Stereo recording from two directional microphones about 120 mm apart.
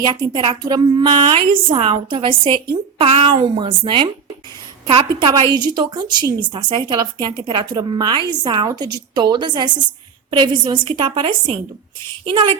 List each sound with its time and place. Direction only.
0.0 s a woman's voice: 45° right (ahead or behind)
3.0 s a woman's voice: 60° right (ahead or behind)
5.3 s a woman's voice: 35° right (ahead or behind)